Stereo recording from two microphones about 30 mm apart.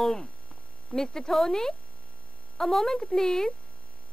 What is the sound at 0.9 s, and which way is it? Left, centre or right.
Speech, centre.